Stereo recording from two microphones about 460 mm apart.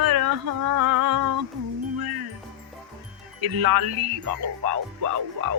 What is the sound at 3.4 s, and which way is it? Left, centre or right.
Speech, right.